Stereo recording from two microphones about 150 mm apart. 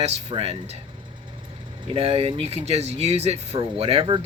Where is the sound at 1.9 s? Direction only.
40° right (ahead or behind).